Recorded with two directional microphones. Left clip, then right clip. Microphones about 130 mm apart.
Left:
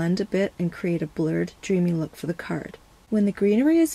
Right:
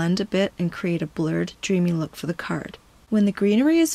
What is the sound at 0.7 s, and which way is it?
Speech, 20° right (ahead or behind).